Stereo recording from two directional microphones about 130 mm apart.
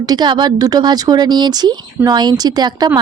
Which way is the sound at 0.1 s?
35° right (ahead or behind).